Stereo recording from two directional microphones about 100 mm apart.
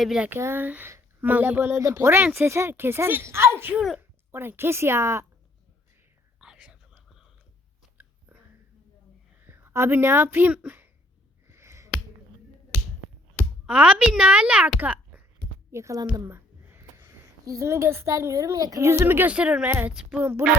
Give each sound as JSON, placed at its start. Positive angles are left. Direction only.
{"t": 0.0, "sound": "speech", "side_deg": -5}
{"t": 0.3, "sound": "speech", "side_deg": -25}
{"t": 3.8, "sound": "speech", "side_deg": -5}
{"t": 4.3, "sound": "speech", "side_deg": -25}
{"t": 6.4, "sound": "whispering", "side_deg": -10}
{"t": 9.5, "sound": "speech", "side_deg": -25}
{"t": 11.4, "sound": "a sound", "side_deg": -25}
{"t": 13.7, "sound": "speech", "side_deg": -15}
{"t": 14.8, "sound": "a sound", "side_deg": -20}
{"t": 15.7, "sound": "speech", "side_deg": -30}
{"t": 16.2, "sound": "a sound", "side_deg": -25}
{"t": 17.4, "sound": "speech", "side_deg": -35}